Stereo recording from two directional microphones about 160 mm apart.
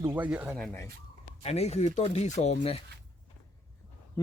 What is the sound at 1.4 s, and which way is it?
Speech, 40° left (ahead or behind).